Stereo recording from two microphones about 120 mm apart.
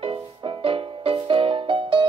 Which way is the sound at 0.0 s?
45° right (ahead or behind).